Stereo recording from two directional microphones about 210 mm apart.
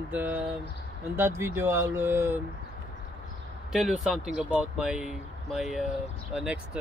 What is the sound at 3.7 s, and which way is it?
Speech, centre (ahead or behind).